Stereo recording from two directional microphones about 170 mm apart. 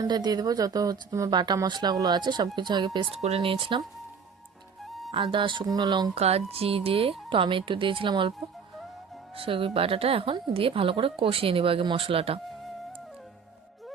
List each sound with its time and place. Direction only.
0.0 s speech: 25° right (ahead or behind)
3.2 s a woman's voice: 40° right (ahead or behind)
4.9 s music: centre (ahead or behind)
5.1 s speech: 30° right (ahead or behind)
6.1 s a woman's voice: 35° right (ahead or behind)
9.3 s a woman's voice: 30° right (ahead or behind)